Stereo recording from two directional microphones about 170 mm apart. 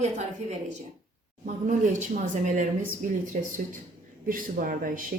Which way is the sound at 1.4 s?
45° right (ahead or behind).